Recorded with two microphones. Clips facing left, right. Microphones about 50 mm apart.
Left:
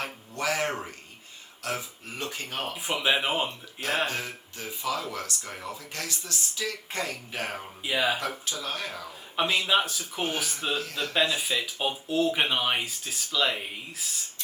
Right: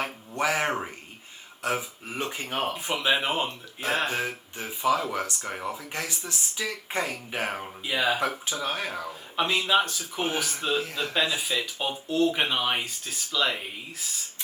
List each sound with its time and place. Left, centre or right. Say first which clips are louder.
0.0 s a sound: right 3 dB; right
1.6 s speech: right 4 dB; right
2.7 s speech: left 2 dB; centre
4.0 s speech: right 2 dB; right
7.9 s speech: right 1 dB; centre
8.2 s speech: right 4 dB; right
9.3 s speech: right 1 dB; centre